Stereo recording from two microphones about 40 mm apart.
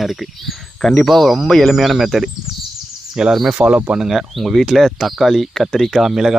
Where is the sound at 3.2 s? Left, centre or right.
Centre.